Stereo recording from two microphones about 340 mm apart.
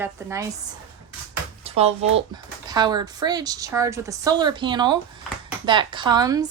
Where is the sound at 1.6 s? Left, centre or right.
Centre.